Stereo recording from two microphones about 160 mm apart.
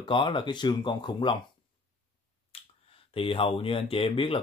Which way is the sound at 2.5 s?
40° left (ahead or behind).